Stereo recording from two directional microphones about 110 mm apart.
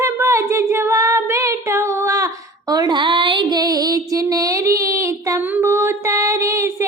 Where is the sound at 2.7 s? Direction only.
40° right (ahead or behind).